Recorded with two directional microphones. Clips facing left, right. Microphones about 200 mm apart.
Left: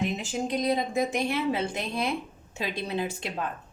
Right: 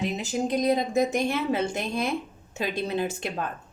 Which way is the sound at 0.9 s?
45° right (ahead or behind).